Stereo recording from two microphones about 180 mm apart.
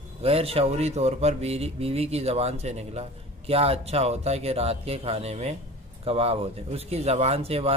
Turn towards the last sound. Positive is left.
turn(degrees=-35)  # may be behind; listen again after turning